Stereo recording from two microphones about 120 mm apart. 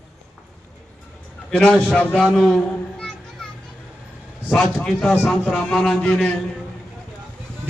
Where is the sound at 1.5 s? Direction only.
10° left (ahead or behind).